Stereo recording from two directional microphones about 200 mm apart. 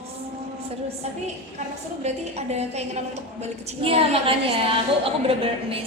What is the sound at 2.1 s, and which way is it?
A woman's voice, 35° right (ahead or behind).